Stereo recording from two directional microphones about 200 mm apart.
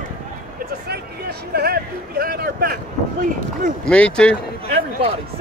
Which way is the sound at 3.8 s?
5° left (ahead or behind).